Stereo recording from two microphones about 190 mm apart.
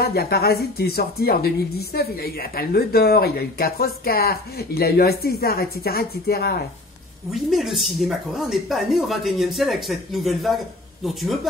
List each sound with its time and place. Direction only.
0.0 s speech: 55° left (ahead or behind)
7.3 s speech: centre (ahead or behind)